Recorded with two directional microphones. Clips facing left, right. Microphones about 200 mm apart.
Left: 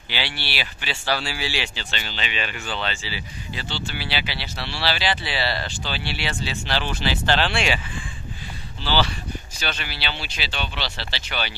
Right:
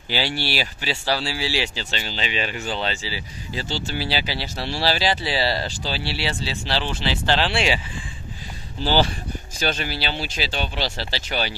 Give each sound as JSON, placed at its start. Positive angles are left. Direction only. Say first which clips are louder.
{"t": 0.1, "sound": "speech", "louder": "right 6 dB", "side_deg": -40}
{"t": 8.8, "sound": "speech", "louder": "right 3 dB", "side_deg": -45}